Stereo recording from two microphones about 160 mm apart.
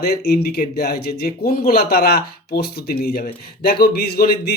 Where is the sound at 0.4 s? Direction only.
70° left (ahead or behind).